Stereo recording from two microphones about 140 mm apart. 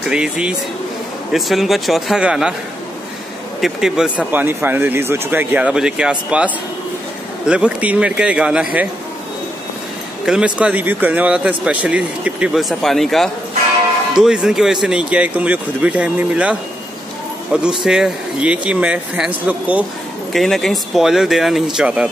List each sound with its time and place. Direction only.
0.1 s speech: 5° right (ahead or behind)
3.6 s speech: 5° right (ahead or behind)
10.2 s speech: 5° right (ahead or behind)
20.3 s speech: centre (ahead or behind)